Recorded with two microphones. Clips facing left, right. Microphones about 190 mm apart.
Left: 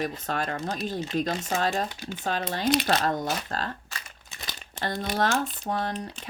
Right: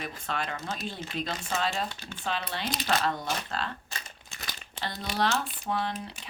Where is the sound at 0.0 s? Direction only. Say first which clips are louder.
Left 5 dB; 45° left (ahead or behind).